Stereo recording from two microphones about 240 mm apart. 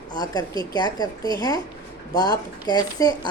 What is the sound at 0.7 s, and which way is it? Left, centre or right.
A woman's voice, centre.